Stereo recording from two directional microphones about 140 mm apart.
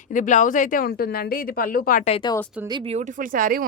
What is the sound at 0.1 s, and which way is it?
Speech, 65° left (ahead or behind).